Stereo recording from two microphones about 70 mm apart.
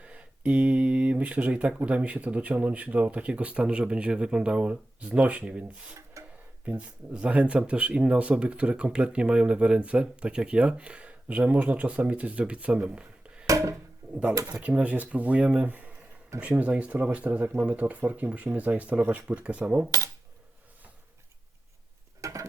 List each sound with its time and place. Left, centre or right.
0.0 s speech: centre
6.2 s a sound: right
6.7 s speech: centre
13.5 s a sound: right
14.5 s speech: centre
22.2 s tick-tock: right